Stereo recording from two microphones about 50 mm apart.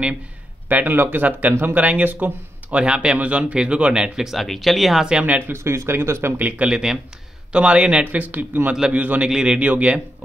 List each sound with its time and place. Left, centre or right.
0.7 s speech: right
2.8 s speech: centre
4.3 s speech: centre
5.5 s speech: right
6.3 s speech: right
6.7 s speech: centre
7.5 s speech: right
9.3 s speech: centre
9.6 s speech: right